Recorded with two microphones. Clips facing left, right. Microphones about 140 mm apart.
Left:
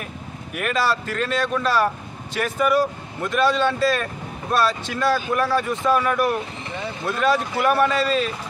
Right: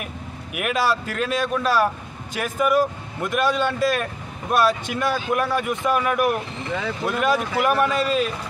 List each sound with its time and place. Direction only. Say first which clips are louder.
0.6 s speech: even; 10° right (ahead or behind)